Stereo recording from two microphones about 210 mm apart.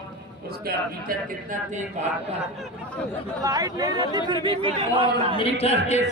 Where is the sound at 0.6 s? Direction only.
40° right (ahead or behind).